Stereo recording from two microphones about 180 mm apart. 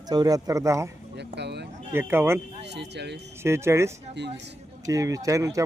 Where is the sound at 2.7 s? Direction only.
70° right (ahead or behind).